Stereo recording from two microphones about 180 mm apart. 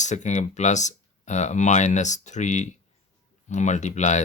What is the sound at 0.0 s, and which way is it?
Speech, 40° left (ahead or behind).